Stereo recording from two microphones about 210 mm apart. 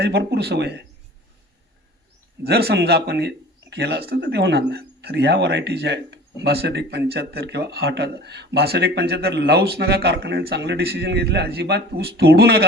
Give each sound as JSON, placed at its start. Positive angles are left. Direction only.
{"t": 0.0, "sound": "speech", "side_deg": -50}
{"t": 2.4, "sound": "speech", "side_deg": -50}